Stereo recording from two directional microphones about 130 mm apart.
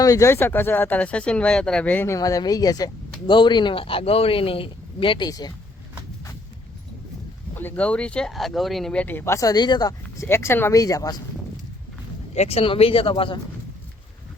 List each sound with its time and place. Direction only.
0.0 s speech: 25° left (ahead or behind)
2.1 s speech: 25° left (ahead or behind)
7.6 s speech: 10° left (ahead or behind); by 9.9 s 35° left (ahead or behind)
10.2 s speech: 20° left (ahead or behind)
12.3 s speech: 55° left (ahead or behind)